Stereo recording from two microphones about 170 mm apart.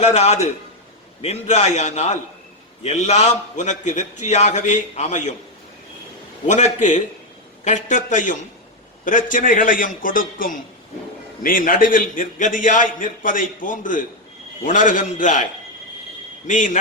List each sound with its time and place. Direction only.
0.0 s a man's voice: 40° left (ahead or behind)
6.5 s a man's voice: 45° left (ahead or behind)
16.5 s a man's voice: 45° left (ahead or behind)